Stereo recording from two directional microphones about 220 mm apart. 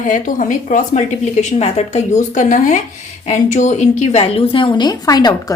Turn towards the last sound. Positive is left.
turn(degrees=15)  # may be behind; listen again after turning